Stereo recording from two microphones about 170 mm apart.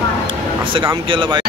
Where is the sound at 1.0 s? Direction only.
30° right (ahead or behind).